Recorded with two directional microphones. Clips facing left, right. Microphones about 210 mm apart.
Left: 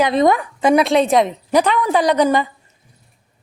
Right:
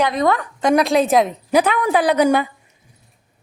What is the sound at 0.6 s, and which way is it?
A woman's voice, centre (ahead or behind).